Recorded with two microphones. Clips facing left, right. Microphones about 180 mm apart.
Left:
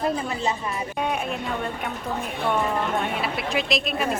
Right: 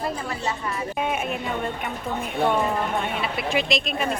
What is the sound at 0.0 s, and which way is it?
Speech, 20° left (ahead or behind).